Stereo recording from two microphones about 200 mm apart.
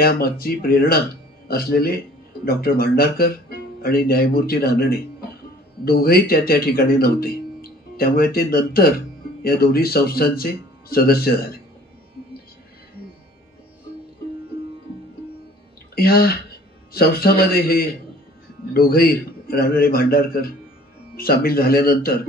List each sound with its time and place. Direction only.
0.0 s speech: 50° left (ahead or behind)
15.9 s speech: 50° left (ahead or behind)